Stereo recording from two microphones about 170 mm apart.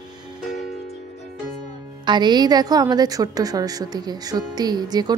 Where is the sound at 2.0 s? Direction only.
25° right (ahead or behind).